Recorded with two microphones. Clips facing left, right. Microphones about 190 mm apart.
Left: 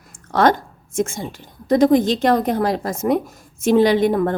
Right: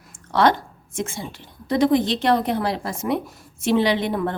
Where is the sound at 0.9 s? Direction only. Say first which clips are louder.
Left 6 dB; 45° left (ahead or behind).